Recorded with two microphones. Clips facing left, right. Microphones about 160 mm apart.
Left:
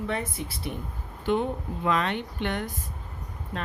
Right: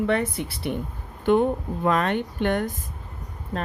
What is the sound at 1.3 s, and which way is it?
Speech, 50° right (ahead or behind).